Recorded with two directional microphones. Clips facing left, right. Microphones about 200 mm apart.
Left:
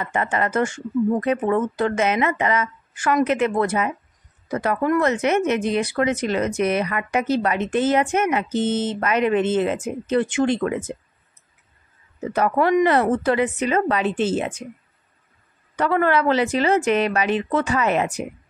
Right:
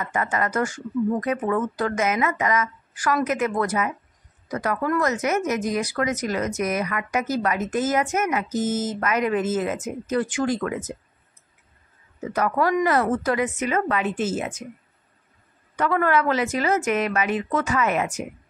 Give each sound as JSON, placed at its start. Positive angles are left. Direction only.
{"t": 0.0, "sound": "speech", "side_deg": 30}
{"t": 12.3, "sound": "speech", "side_deg": 25}
{"t": 15.7, "sound": "speech", "side_deg": 30}